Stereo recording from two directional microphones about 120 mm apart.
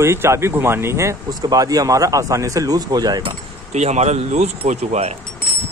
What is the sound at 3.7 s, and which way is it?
Speech, 70° right (ahead or behind).